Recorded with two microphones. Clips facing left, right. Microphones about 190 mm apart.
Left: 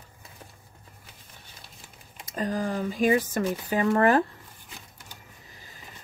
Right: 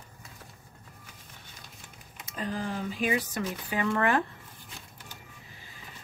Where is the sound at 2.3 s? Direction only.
45° left (ahead or behind).